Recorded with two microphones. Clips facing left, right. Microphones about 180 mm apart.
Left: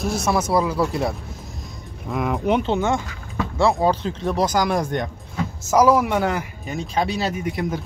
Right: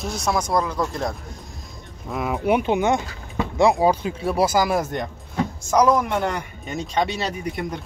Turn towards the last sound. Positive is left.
turn(degrees=0)  # may be behind; listen again after turning